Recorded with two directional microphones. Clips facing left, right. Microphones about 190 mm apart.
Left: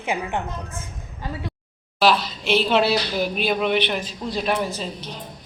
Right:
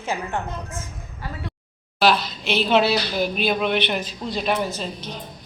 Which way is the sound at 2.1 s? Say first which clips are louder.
Left 2 dB; 35° left (ahead or behind).